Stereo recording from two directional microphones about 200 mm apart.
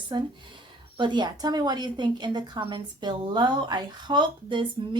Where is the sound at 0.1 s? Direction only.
20° right (ahead or behind).